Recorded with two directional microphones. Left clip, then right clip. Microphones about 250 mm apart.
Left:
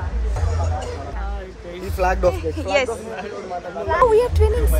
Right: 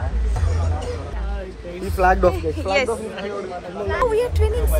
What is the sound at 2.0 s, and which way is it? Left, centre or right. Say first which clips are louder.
Speech: right 3 dB; right.